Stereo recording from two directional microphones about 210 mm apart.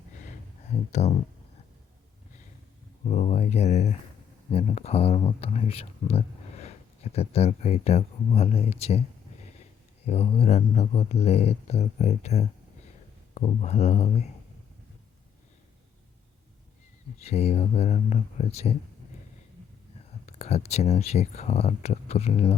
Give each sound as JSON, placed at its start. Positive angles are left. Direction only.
{"t": 0.9, "sound": "speech", "side_deg": 30}
{"t": 3.0, "sound": "speech", "side_deg": 30}
{"t": 10.1, "sound": "speech", "side_deg": 30}
{"t": 17.2, "sound": "speech", "side_deg": 30}
{"t": 20.2, "sound": "speech", "side_deg": 30}